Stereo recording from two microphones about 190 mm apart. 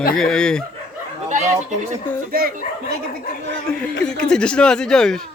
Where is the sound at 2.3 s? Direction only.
50° right (ahead or behind).